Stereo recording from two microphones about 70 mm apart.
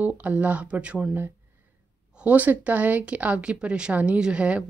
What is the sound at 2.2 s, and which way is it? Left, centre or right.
A woman's voice, right.